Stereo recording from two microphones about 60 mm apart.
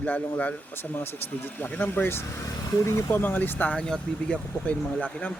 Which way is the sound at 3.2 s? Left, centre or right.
Left.